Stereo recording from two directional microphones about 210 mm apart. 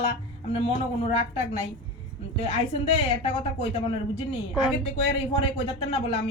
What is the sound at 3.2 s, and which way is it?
Speech, 25° left (ahead or behind).